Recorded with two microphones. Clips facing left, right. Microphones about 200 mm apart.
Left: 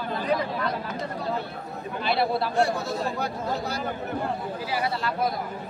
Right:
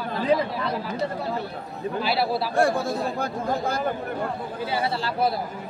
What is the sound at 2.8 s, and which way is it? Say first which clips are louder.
Speech: right 2 dB; 50° right (ahead or behind).